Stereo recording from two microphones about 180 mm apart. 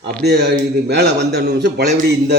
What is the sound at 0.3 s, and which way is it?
A man's voice, 65° right (ahead or behind).